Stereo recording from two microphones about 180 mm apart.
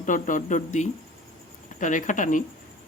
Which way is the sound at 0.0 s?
45° left (ahead or behind).